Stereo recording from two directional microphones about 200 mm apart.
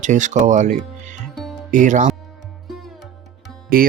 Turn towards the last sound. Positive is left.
turn(degrees=-45)  # may be behind; listen again after turning